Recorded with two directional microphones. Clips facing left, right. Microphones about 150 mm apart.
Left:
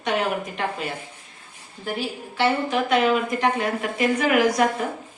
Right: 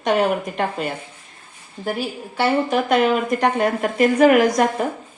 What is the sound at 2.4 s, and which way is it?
A woman's voice, 45° right (ahead or behind).